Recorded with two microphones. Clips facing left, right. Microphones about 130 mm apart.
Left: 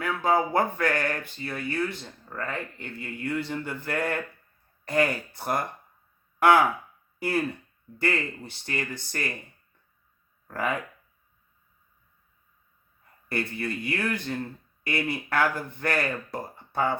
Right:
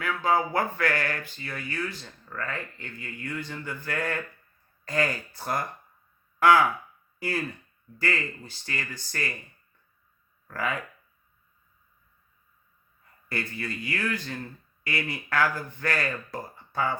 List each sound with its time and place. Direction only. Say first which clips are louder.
0.3 s speech: left 2 dB; 20° left (ahead or behind)
10.5 s speech: left 2 dB; 20° left (ahead or behind)
13.2 s speech: left 3 dB; 25° left (ahead or behind)